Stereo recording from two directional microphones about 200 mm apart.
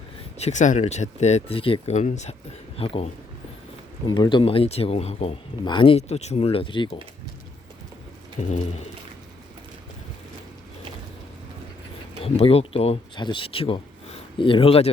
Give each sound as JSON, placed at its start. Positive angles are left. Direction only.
{"t": 0.3, "sound": "speech", "side_deg": 35}
{"t": 8.4, "sound": "speech", "side_deg": 35}
{"t": 12.2, "sound": "speech", "side_deg": 30}